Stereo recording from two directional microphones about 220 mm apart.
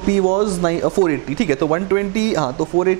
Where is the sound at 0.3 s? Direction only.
25° right (ahead or behind).